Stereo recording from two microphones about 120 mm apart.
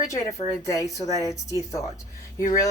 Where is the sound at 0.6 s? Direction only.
30° left (ahead or behind).